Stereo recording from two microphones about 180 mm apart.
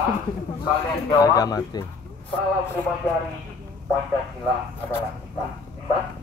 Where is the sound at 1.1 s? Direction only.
20° left (ahead or behind).